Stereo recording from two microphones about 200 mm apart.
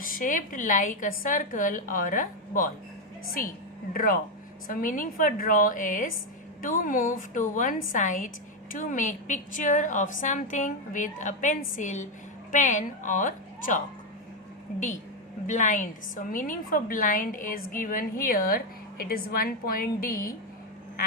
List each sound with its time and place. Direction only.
0.0 s a woman's voice: 45° left (ahead or behind)
3.9 s a woman's voice: 45° left (ahead or behind)